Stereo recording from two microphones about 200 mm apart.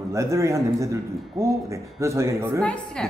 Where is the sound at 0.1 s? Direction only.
15° right (ahead or behind).